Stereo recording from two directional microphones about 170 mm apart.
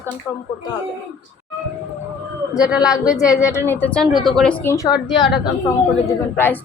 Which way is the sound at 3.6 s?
10° left (ahead or behind).